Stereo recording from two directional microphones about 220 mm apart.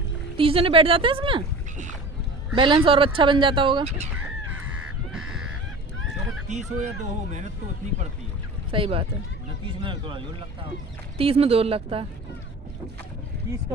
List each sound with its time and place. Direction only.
0.4 s fowl: 25° right (ahead or behind)
5.1 s goose: 5° right (ahead or behind)
6.5 s speech: 30° right (ahead or behind)
8.7 s fowl: 25° right (ahead or behind)